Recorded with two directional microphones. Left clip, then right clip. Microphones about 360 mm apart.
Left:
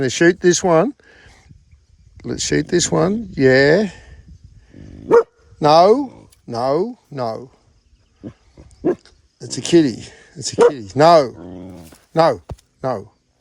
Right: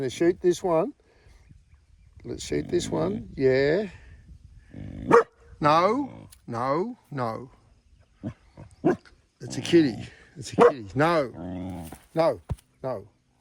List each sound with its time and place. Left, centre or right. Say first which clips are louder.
0.0 s speech: left 9 dB; left
1.0 s a sound: left 14 dB; left
2.1 s speech: left 10 dB; left
5.5 s speech: left 10 dB; centre
9.0 s speech: left 9 dB; centre